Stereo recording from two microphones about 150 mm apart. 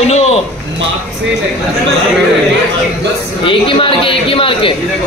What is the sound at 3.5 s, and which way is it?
Speech, 35° left (ahead or behind).